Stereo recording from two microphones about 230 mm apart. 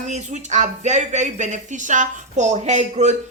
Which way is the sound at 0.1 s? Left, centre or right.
Right.